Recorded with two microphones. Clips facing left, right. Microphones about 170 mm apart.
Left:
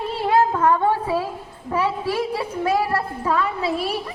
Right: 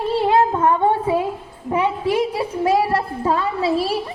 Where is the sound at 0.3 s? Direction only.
25° right (ahead or behind).